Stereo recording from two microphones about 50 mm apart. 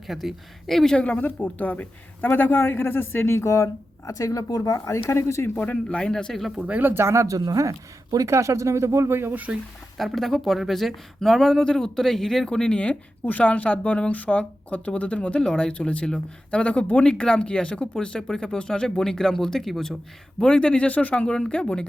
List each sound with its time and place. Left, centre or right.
0.1 s speech: centre
0.9 s a man's voice: left
5.5 s speech: left
6.1 s speech: centre
6.6 s speech: right
6.8 s speech: right
10.0 s speech: centre
20.4 s speech: left